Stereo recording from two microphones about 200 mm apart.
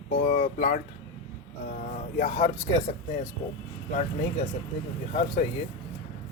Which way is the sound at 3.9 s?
40° left (ahead or behind).